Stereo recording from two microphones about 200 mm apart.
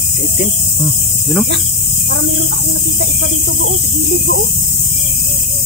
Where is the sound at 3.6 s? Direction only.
60° right (ahead or behind).